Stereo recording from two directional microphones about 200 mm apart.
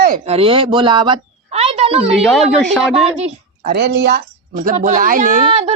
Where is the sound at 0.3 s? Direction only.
30° right (ahead or behind).